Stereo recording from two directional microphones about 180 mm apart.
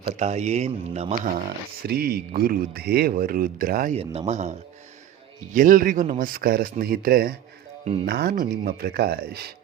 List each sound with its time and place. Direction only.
0.0 s speech: 40° right (ahead or behind)
1.8 s a man's voice: 60° right (ahead or behind)
3.9 s speech: 35° right (ahead or behind)
5.5 s a man's voice: 50° right (ahead or behind)